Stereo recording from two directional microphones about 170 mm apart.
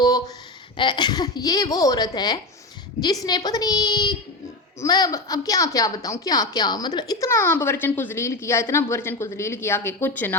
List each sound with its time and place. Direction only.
0.8 s a woman's voice: 25° left (ahead or behind)